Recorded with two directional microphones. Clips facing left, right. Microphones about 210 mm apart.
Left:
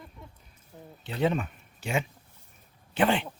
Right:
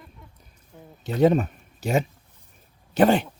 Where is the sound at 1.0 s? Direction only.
40° right (ahead or behind).